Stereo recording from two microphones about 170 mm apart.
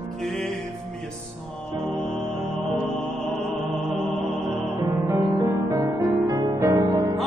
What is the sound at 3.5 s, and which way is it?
Music, centre (ahead or behind).